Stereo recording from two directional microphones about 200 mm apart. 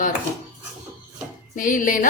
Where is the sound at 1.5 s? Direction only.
40° left (ahead or behind).